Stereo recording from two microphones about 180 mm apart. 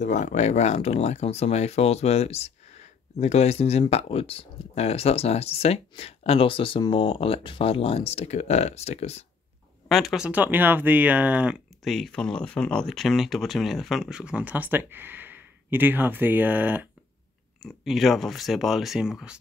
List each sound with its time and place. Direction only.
0.0 s speech: 40° left (ahead or behind)
9.8 s speech: centre (ahead or behind)
17.6 s speech: centre (ahead or behind)